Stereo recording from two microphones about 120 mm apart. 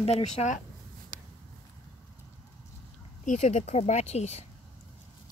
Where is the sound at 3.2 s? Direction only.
85° left; by 4.4 s 65° left (ahead or behind).